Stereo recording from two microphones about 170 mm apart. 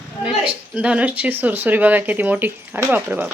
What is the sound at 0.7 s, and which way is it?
Speech, 5° right (ahead or behind).